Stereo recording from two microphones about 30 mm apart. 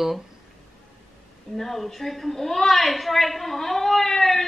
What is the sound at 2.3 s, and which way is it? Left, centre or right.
A woman's voice, centre.